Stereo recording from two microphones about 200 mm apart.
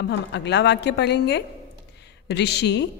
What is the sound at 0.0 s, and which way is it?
A woman's voice, 60° left (ahead or behind).